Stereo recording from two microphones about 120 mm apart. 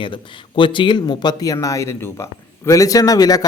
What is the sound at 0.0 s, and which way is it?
Speech, 45° left (ahead or behind).